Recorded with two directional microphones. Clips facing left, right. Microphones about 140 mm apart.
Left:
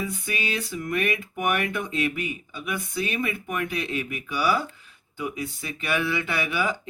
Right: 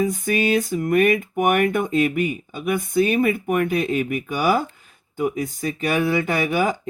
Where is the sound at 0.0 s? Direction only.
45° right (ahead or behind).